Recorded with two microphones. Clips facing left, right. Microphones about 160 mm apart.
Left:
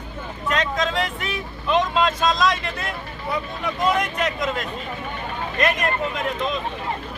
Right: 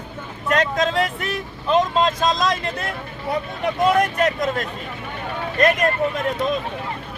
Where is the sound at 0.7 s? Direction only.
40° right (ahead or behind).